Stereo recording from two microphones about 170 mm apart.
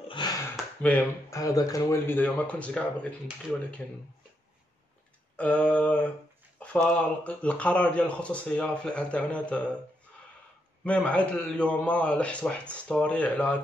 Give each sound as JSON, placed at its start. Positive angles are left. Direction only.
{"t": 0.2, "sound": "a sound", "side_deg": 25}
{"t": 0.8, "sound": "speech", "side_deg": 10}
{"t": 1.4, "sound": "speech", "side_deg": 20}
{"t": 5.3, "sound": "speech", "side_deg": 10}
{"t": 10.8, "sound": "speech", "side_deg": 10}